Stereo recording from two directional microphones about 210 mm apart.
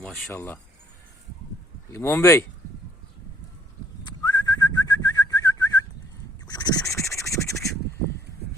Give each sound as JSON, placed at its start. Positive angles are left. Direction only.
{"t": 0.0, "sound": "speech", "side_deg": 5}
{"t": 1.9, "sound": "speech", "side_deg": 10}
{"t": 4.0, "sound": "whistling", "side_deg": 20}
{"t": 6.5, "sound": "a sound", "side_deg": 20}
{"t": 7.2, "sound": "crow", "side_deg": 15}